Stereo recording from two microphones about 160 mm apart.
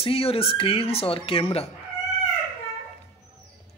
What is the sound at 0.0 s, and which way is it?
A woman's voice, 35° left (ahead or behind).